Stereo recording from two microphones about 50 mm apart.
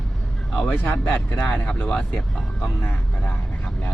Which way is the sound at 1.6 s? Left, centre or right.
Centre.